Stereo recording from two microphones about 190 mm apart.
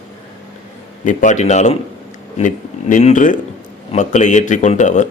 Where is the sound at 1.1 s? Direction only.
40° left (ahead or behind).